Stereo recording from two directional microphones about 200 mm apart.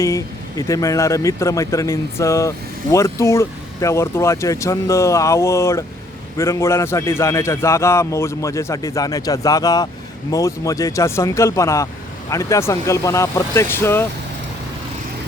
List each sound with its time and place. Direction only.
0.0 s a man's voice: 15° left (ahead or behind)